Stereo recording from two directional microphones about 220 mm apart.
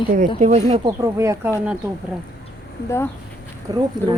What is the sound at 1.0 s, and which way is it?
Speech, 15° right (ahead or behind).